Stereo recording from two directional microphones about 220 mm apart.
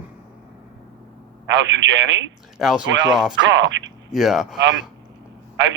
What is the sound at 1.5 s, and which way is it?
Speech, 55° right (ahead or behind).